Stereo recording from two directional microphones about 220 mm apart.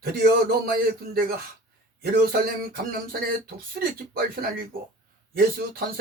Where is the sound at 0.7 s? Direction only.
40° right (ahead or behind).